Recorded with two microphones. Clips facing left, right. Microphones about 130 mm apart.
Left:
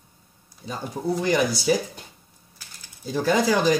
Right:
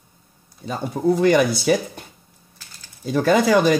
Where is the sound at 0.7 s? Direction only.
60° right (ahead or behind).